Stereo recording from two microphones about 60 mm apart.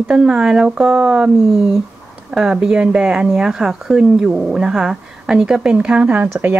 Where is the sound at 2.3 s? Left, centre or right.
Centre.